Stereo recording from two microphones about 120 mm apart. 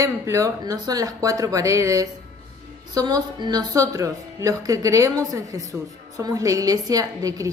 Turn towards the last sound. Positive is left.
turn(degrees=-30)  # may be behind; listen again after turning